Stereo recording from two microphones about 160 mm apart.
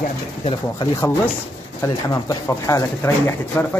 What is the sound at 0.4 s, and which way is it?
Speech, 35° left (ahead or behind).